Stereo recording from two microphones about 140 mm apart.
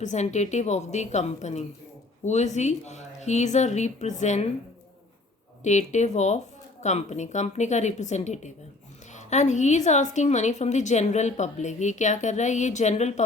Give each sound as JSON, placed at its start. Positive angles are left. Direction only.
{"t": 0.0, "sound": "a woman's voice", "side_deg": 55}
{"t": 5.6, "sound": "a woman's voice", "side_deg": 55}